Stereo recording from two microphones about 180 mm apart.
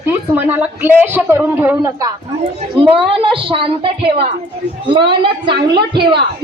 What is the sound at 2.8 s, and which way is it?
A woman's voice, 30° right (ahead or behind).